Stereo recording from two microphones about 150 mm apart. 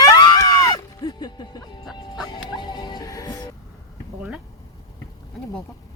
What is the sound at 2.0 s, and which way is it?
Music, 30° left (ahead or behind).